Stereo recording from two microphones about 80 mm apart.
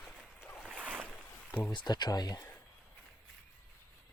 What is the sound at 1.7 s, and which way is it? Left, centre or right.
Speech, left.